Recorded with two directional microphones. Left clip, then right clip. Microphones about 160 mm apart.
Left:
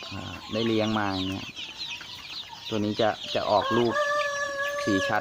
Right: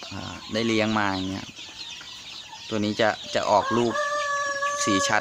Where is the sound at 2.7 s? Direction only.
15° right (ahead or behind).